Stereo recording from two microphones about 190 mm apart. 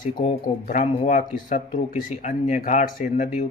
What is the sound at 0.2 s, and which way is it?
Speech, 40° left (ahead or behind).